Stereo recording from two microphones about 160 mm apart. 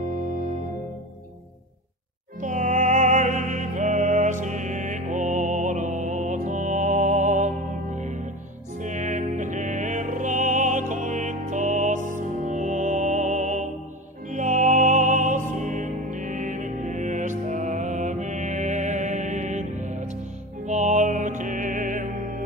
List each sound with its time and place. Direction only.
2.4 s music: 50° right (ahead or behind)